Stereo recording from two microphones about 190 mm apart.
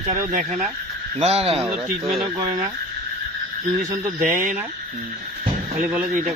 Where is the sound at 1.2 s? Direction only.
30° right (ahead or behind).